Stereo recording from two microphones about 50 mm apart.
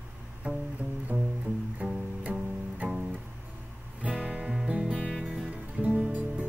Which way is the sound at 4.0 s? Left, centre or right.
Right.